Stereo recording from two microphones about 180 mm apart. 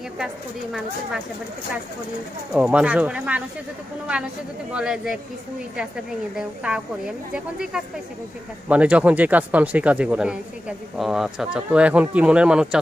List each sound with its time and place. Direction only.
2.5 s speech: 5° right (ahead or behind)
4.7 s speech: 5° right (ahead or behind)